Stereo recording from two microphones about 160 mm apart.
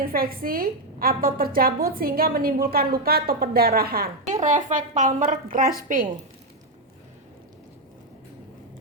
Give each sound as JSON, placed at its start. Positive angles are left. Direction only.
{"t": 0.0, "sound": "a woman's voice", "side_deg": -65}
{"t": 4.3, "sound": "a woman's voice", "side_deg": -50}